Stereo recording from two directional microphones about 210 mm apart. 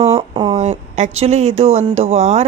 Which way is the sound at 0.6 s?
35° right (ahead or behind).